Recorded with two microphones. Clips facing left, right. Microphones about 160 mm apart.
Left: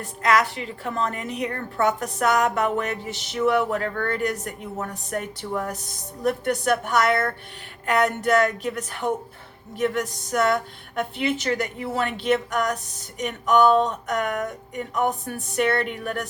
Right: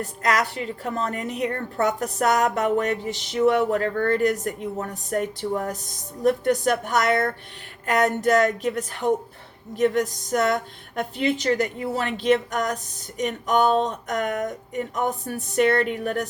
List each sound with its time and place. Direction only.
0.2 s a woman's voice: 40° right (ahead or behind)
15.5 s a woman's voice: 40° right (ahead or behind)